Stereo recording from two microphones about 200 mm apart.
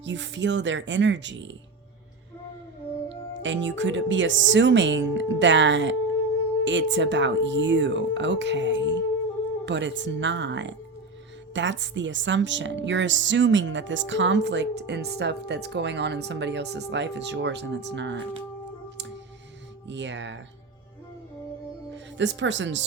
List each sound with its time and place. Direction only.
0.0 s a woman's voice: 65° right (ahead or behind)
3.1 s a woman's voice: 65° right (ahead or behind)
19.9 s a woman's voice: 65° right (ahead or behind)
21.9 s speech: 60° right (ahead or behind)